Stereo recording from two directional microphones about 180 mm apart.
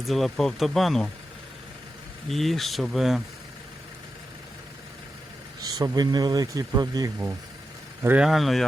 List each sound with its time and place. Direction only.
0.1 s speech: centre (ahead or behind)
2.3 s speech: centre (ahead or behind)
5.6 s speech: 20° right (ahead or behind)
8.0 s speech: 5° right (ahead or behind)